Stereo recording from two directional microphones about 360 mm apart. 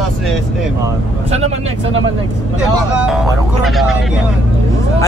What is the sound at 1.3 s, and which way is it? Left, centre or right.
Speech, centre.